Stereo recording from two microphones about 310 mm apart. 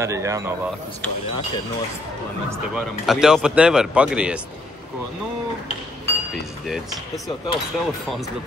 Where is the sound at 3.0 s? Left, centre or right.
Centre.